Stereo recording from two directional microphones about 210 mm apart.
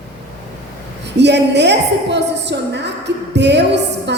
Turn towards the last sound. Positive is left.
turn(degrees=-55)  # may be behind; listen again after turning